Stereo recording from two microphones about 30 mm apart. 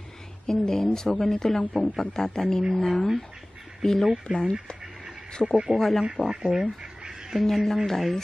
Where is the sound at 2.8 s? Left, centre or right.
Centre.